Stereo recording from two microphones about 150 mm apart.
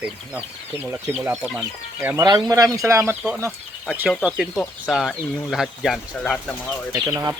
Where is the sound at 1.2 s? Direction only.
10° right (ahead or behind).